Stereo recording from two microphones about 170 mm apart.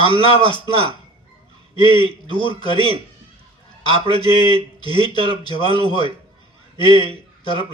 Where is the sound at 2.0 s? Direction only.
25° left (ahead or behind).